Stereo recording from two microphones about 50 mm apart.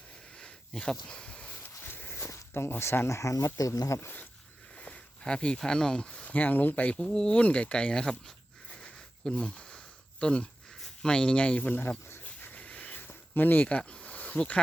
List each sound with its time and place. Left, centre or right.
0.3 s a sound: centre
1.8 s walk: left
2.1 s a sound: left
2.5 s speech: left
3.1 s speech: left
4.8 s speech: left
9.2 s snake: centre
10.8 s speech: centre
11.7 s speech: left
12.0 s a sound: left
12.5 s a sound: left
13.7 s speech: left